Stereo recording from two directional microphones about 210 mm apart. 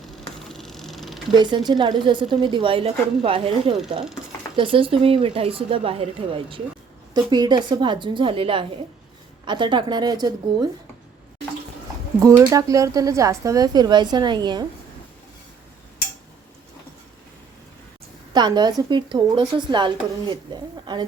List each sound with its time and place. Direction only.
0.4 s a sound: centre (ahead or behind)
1.3 s a woman's voice: 20° right (ahead or behind)
12.2 s speech: 15° right (ahead or behind)
18.3 s a woman's voice: 20° right (ahead or behind)